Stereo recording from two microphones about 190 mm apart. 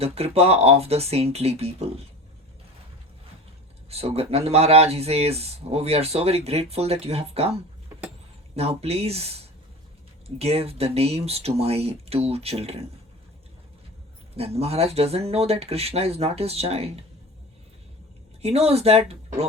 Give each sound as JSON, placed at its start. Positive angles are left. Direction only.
{"t": 0.0, "sound": "speech", "side_deg": -30}
{"t": 3.8, "sound": "speech", "side_deg": -30}
{"t": 14.3, "sound": "speech", "side_deg": -30}
{"t": 18.4, "sound": "speech", "side_deg": -30}